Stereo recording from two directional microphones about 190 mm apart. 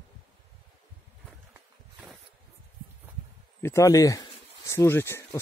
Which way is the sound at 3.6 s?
15° left (ahead or behind).